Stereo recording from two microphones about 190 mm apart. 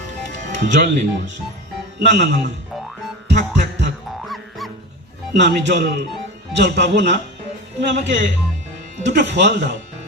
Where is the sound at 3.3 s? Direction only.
40° right (ahead or behind).